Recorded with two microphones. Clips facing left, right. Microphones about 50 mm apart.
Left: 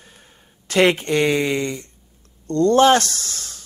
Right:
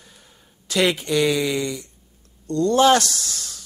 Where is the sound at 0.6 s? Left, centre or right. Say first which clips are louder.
Left 4 dB; left.